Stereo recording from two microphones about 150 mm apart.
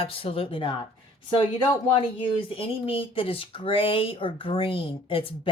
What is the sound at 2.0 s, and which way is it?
Speech, 35° left (ahead or behind).